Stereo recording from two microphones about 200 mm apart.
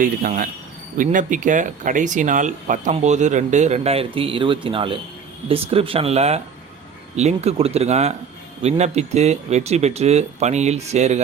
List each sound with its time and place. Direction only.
0.0 s speech: 45° right (ahead or behind)